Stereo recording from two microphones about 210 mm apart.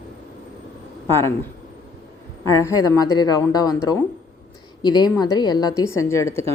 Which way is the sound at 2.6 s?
20° left (ahead or behind).